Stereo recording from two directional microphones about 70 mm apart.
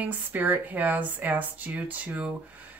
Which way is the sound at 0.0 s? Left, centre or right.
Right.